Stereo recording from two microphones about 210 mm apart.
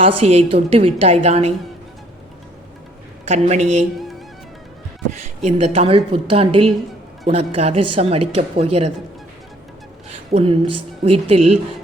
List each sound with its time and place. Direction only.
0.0 s speech: 30° right (ahead or behind)
3.2 s a woman's voice: 30° right (ahead or behind)
5.2 s speech: 30° right (ahead or behind)
10.3 s speech: 25° right (ahead or behind)